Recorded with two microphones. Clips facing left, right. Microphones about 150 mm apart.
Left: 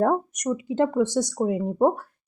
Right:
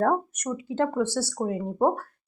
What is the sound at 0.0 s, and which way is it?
Speech, 10° left (ahead or behind).